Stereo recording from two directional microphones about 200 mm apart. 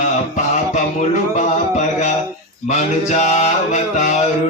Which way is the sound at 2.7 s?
35° left (ahead or behind).